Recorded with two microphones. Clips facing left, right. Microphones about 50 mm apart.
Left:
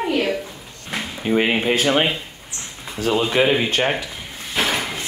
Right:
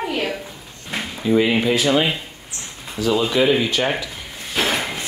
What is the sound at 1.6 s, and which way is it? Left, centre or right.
Speech, left.